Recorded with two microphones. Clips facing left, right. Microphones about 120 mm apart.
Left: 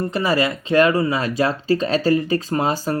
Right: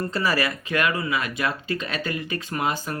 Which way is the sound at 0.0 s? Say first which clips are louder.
Left 5 dB; 20° left (ahead or behind).